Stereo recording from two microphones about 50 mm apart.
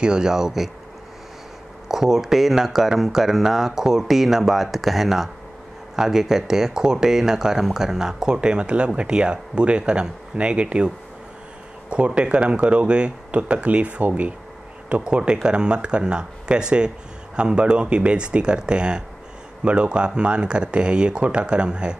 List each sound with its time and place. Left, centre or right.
0.0 s speech: centre
1.9 s speech: centre
11.9 s speech: right